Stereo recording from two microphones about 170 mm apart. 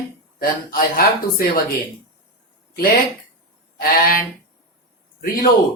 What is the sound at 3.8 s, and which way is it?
Speech, 60° left (ahead or behind).